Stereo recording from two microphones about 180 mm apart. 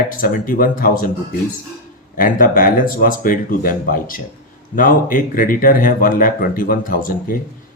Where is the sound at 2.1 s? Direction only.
50° left (ahead or behind).